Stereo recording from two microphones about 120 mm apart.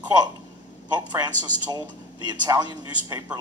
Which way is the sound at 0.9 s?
35° right (ahead or behind).